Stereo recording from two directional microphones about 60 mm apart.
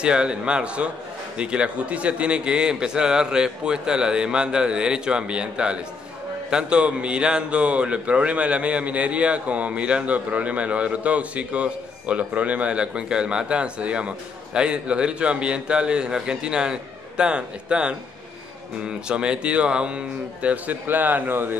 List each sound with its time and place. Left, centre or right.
0.0 s a man's voice: centre
20.4 s speech: right